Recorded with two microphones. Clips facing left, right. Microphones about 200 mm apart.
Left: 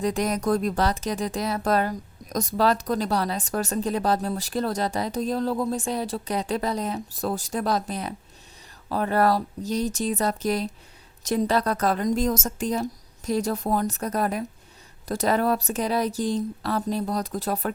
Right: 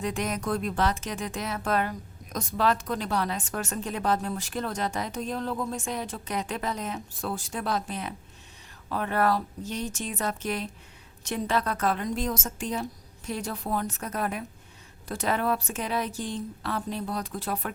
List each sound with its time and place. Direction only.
0.0 s speech: 35° left (ahead or behind)